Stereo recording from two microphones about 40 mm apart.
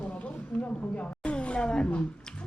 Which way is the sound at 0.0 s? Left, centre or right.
Left.